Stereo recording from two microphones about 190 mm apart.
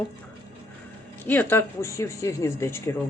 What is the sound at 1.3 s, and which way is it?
Speech, 10° left (ahead or behind).